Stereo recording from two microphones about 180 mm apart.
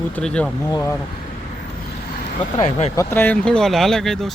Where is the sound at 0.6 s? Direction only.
15° left (ahead or behind).